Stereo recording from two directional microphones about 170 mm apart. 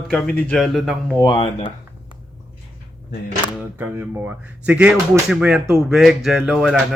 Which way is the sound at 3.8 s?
10° right (ahead or behind).